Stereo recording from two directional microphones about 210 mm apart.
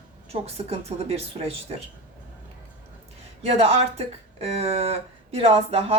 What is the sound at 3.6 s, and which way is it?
A woman's voice, 30° right (ahead or behind).